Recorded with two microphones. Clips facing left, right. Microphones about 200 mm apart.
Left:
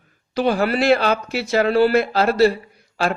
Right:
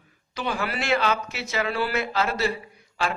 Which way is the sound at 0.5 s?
55° left (ahead or behind).